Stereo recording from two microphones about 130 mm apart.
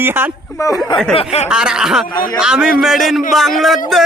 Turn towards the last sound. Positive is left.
turn(degrees=0)  # may be behind; listen again after turning